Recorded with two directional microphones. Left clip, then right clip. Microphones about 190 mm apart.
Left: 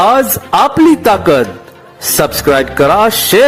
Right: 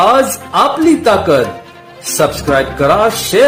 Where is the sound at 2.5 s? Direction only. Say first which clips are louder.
Left 1 dB; 45° left (ahead or behind).